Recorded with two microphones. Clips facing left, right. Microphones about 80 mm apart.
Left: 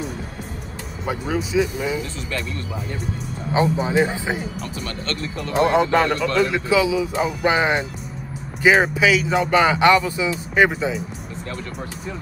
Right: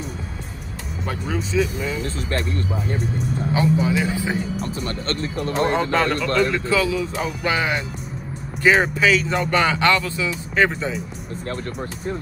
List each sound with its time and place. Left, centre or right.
1.0 s speech: centre
3.5 s speech: left
4.8 s speech: right
5.7 s speech: centre
7.4 s speech: left
8.6 s speech: centre